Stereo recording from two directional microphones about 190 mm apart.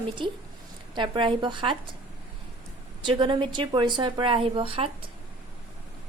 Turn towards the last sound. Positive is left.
turn(degrees=-30)  # may be behind; listen again after turning